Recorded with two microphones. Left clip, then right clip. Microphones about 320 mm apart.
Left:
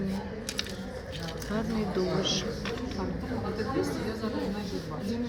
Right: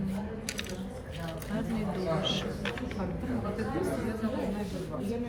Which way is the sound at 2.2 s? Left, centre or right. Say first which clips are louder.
Left 2 dB; centre.